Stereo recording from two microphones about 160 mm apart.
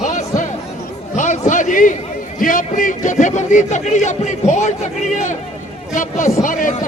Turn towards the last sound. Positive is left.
turn(degrees=55)  # may be behind; listen again after turning